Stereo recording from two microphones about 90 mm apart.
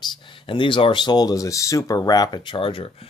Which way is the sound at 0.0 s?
70° left (ahead or behind).